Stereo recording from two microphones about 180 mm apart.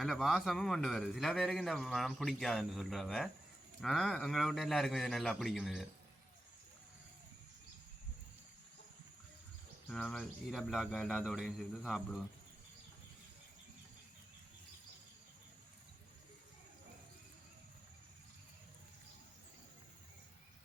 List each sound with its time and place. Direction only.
0.0 s a man's voice: centre (ahead or behind)
9.9 s a man's voice: 5° left (ahead or behind)